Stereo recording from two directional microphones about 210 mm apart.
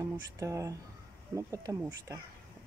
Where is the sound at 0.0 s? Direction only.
15° right (ahead or behind).